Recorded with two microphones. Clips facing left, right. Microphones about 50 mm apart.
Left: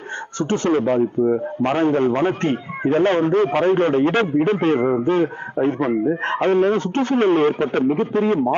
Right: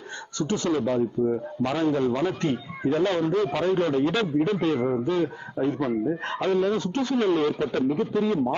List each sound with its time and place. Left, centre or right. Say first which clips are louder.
0.3 s a man's voice: left 6 dB; left